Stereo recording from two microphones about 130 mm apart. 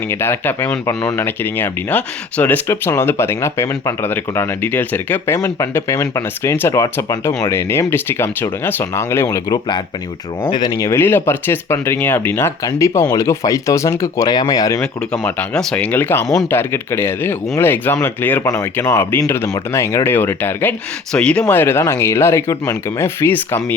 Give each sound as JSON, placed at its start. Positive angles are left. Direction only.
{"t": 0.1, "sound": "speech", "side_deg": 15}
{"t": 16.2, "sound": "speech", "side_deg": 0}
{"t": 16.5, "sound": "speech", "side_deg": 20}
{"t": 18.4, "sound": "speech", "side_deg": 25}